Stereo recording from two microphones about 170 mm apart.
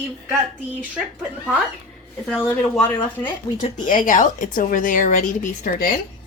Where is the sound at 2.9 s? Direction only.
25° left (ahead or behind).